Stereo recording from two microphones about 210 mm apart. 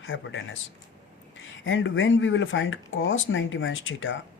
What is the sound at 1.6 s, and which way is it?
Speech, 65° left (ahead or behind).